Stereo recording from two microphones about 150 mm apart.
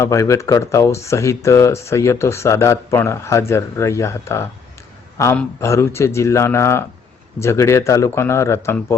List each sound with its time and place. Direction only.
0.0 s a man's voice: 20° left (ahead or behind)